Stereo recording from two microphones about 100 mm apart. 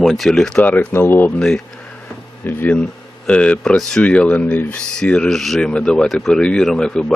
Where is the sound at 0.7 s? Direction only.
20° left (ahead or behind).